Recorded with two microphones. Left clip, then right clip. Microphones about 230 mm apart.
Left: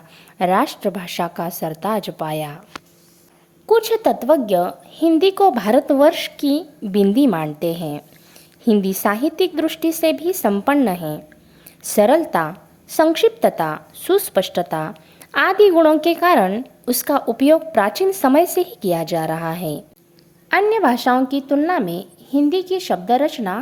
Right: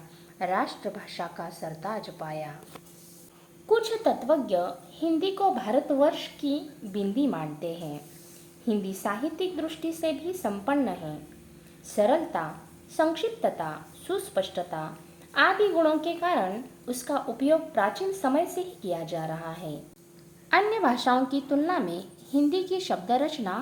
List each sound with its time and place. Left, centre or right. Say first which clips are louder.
0.3 s a woman's voice: left 11 dB; left
3.7 s a woman's voice: left 9 dB; left
20.5 s speech: left 8 dB; left